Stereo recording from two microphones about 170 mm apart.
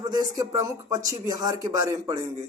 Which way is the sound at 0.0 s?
20° right (ahead or behind).